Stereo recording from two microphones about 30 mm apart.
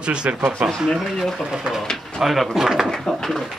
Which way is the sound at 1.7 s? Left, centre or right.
Centre.